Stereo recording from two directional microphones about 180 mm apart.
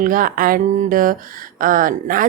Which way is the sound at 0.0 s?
50° right (ahead or behind).